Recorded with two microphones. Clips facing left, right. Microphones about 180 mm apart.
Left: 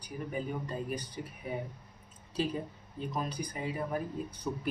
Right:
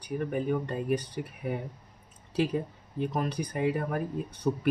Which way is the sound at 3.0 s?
65° right (ahead or behind).